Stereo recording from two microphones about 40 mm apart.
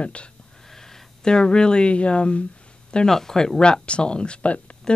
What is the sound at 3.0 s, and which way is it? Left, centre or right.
Speech, centre.